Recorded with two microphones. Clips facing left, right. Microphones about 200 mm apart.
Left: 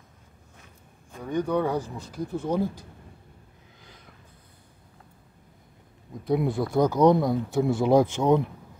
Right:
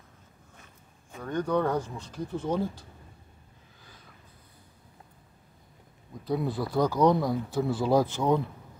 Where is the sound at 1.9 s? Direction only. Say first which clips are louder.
Left 3 dB; 10° left (ahead or behind).